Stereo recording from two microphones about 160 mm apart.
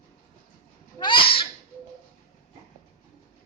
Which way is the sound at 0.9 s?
30° left (ahead or behind).